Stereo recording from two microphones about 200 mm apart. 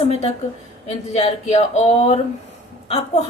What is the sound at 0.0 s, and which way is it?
A woman's voice, 30° left (ahead or behind).